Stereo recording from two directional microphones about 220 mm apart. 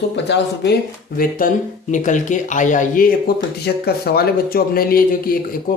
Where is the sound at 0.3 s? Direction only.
50° left (ahead or behind).